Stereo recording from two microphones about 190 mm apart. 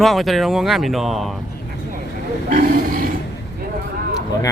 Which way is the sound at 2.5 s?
50° right (ahead or behind).